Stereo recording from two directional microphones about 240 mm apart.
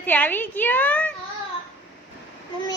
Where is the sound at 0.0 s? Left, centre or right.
Centre.